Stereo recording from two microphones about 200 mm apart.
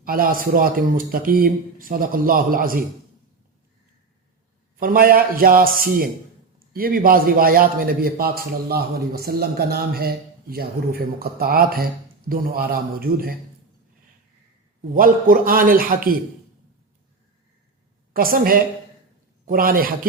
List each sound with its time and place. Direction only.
0.0 s a man's voice: 45° right (ahead or behind)
4.8 s a man's voice: 45° right (ahead or behind)
14.9 s a man's voice: 45° right (ahead or behind)
18.1 s a man's voice: 45° right (ahead or behind)